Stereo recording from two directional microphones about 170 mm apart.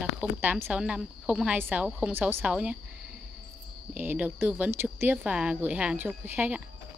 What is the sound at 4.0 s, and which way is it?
Speech, 10° right (ahead or behind).